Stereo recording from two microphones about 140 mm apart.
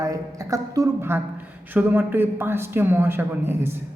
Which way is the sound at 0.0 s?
25° right (ahead or behind).